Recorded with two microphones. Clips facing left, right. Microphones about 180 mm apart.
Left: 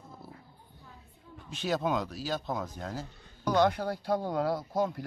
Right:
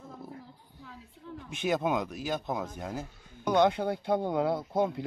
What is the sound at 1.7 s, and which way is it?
A man's voice, 15° right (ahead or behind).